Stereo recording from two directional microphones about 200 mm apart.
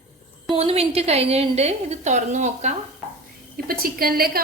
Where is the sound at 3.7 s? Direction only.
45° right (ahead or behind).